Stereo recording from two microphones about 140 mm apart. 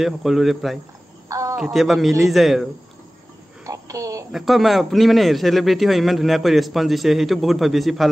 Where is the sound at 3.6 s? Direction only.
25° right (ahead or behind).